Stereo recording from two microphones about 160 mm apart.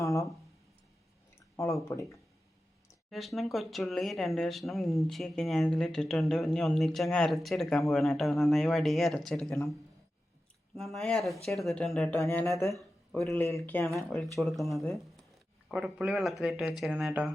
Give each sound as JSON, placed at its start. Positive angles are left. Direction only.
{"t": 0.0, "sound": "a sound", "side_deg": 20}
{"t": 1.5, "sound": "speech", "side_deg": 20}
{"t": 3.1, "sound": "speech", "side_deg": 0}
{"t": 10.8, "sound": "speech", "side_deg": 0}
{"t": 14.3, "sound": "speech", "side_deg": 0}